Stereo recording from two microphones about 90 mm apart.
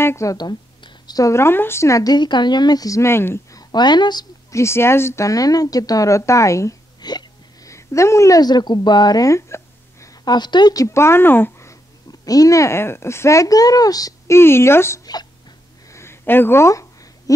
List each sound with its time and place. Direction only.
0.0 s speech: 30° left (ahead or behind)
0.4 s a sound: 50° left (ahead or behind)
1.3 s a woman's voice: 25° left (ahead or behind)
3.5 s a woman's voice: 55° left (ahead or behind)
4.5 s a woman's voice: 30° left (ahead or behind)
7.0 s music: 50° left (ahead or behind)
7.7 s speech: 35° left (ahead or behind)
8.4 s a woman's voice: 50° left (ahead or behind); by 10.1 s 35° left (ahead or behind)
10.2 s a woman's voice: 55° left (ahead or behind); by 11.7 s 25° left (ahead or behind)
12.1 s a woman's voice: 45° left (ahead or behind)
14.3 s speech: 30° left (ahead or behind)
15.9 s a sound: 30° left (ahead or behind)